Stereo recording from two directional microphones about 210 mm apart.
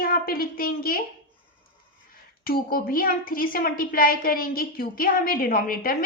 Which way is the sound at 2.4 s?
45° left (ahead or behind).